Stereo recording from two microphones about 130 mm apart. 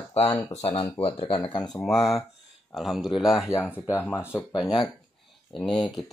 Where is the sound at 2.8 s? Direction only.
Centre (ahead or behind).